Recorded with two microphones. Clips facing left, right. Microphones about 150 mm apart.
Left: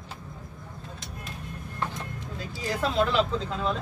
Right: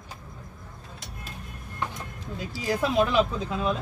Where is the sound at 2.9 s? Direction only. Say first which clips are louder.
Right 1 dB; 15° right (ahead or behind).